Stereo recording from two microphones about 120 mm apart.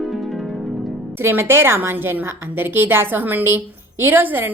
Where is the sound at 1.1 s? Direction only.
20° right (ahead or behind).